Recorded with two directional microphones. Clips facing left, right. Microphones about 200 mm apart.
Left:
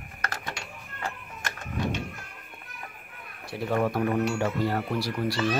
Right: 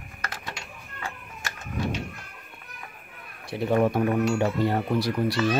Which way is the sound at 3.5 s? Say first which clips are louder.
Right 4 dB; 20° right (ahead or behind).